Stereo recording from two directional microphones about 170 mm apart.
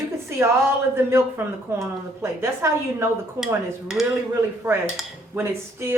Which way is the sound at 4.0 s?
Centre (ahead or behind).